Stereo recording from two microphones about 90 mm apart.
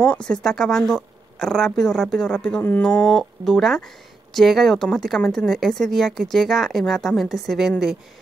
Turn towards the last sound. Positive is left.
turn(degrees=0)  # may be behind; listen again after turning